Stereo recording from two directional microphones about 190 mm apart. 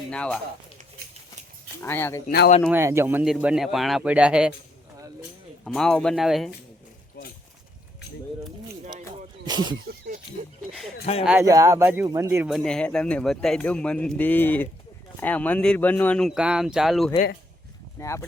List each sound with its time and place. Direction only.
0.1 s speech: 5° left (ahead or behind)
1.8 s speech: 10° left (ahead or behind)
2.2 s speech: 55° left (ahead or behind)
2.6 s speech: 15° right (ahead or behind)
5.6 s speech: 5° left (ahead or behind)
9.5 s speech: 20° right (ahead or behind)
11.0 s speech: 30° left (ahead or behind)
11.3 s speech: 15° right (ahead or behind)
12.5 s speech: centre (ahead or behind)
18.0 s speech: 15° left (ahead or behind)